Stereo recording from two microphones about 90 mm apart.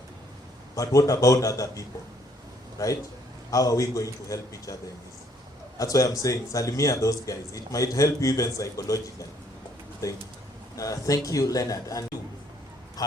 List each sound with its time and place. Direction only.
0.8 s a man's voice: 40° left (ahead or behind)
10.8 s a man's voice: 40° left (ahead or behind)
13.0 s honk: 45° left (ahead or behind)